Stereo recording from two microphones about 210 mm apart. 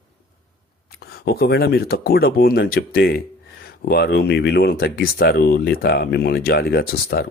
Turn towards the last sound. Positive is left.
turn(degrees=45)  # may be behind; listen again after turning